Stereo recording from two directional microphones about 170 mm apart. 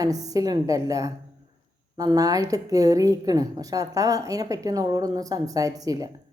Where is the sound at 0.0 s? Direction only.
20° right (ahead or behind).